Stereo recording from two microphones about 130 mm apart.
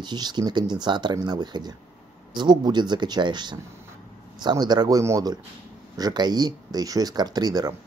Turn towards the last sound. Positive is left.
turn(degrees=-30)  # may be behind; listen again after turning